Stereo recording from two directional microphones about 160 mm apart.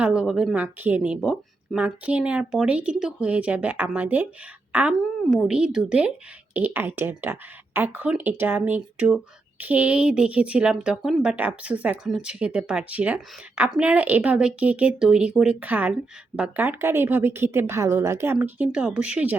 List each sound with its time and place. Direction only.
0.0 s speech: 5° right (ahead or behind)